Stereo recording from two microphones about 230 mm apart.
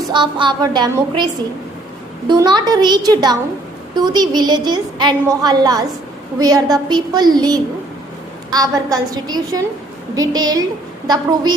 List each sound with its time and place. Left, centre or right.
0.1 s a woman's voice: right